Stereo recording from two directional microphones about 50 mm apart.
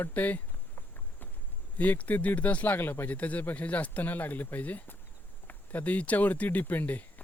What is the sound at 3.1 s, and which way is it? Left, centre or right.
Speech, left.